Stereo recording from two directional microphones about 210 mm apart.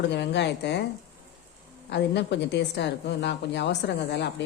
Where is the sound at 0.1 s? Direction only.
55° left (ahead or behind).